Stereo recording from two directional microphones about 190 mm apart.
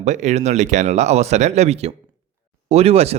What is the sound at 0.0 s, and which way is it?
Speech, 40° right (ahead or behind).